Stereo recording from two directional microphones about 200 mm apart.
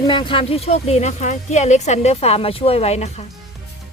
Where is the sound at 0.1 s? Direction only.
25° left (ahead or behind).